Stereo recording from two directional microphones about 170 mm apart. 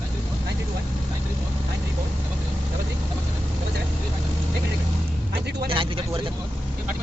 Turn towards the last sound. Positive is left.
turn(degrees=-30)  # may be behind; listen again after turning